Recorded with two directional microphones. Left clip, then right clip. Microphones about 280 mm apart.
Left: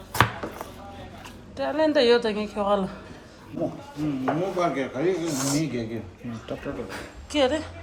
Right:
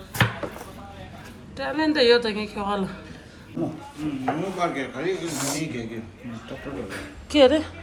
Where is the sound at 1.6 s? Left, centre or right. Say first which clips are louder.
Left 1 dB; centre.